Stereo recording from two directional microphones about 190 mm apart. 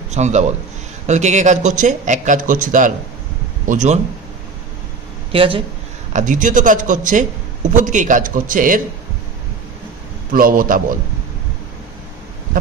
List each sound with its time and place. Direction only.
0.1 s a man's voice: 35° right (ahead or behind)
5.3 s speech: 30° right (ahead or behind)
6.1 s speech: 45° right (ahead or behind)
10.3 s speech: 50° right (ahead or behind)